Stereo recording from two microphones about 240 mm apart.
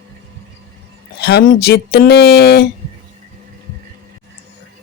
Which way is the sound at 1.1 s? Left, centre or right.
Left.